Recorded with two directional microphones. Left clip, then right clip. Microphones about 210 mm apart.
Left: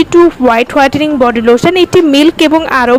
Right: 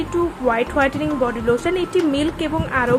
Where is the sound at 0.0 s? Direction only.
45° left (ahead or behind).